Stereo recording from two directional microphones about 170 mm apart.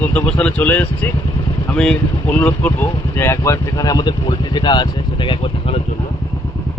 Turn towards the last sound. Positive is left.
turn(degrees=30)  # may be behind; listen again after turning